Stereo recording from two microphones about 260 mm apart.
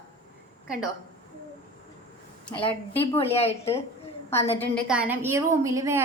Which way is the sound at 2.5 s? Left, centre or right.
Centre.